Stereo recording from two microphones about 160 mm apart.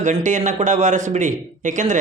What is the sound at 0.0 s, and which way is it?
Speech, 50° right (ahead or behind).